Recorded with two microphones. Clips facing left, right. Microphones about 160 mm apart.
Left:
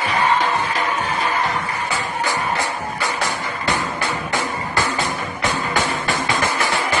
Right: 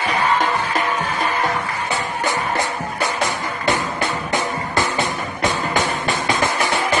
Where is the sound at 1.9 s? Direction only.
20° right (ahead or behind).